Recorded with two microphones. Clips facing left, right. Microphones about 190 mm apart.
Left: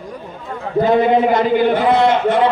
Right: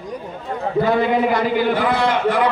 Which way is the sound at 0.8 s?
20° left (ahead or behind).